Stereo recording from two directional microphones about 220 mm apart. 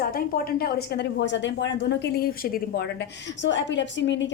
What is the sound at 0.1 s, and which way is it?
A woman's voice, 40° left (ahead or behind).